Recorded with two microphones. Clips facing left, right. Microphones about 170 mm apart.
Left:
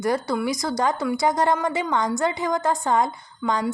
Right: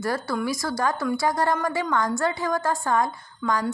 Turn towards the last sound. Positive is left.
turn(degrees=20)  # may be behind; listen again after turning